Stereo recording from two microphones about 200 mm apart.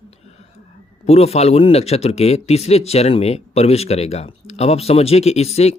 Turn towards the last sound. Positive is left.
turn(degrees=30)  # may be behind; listen again after turning